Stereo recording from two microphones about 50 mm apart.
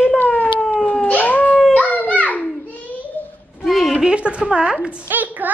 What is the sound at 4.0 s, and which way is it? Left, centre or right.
Speech, right.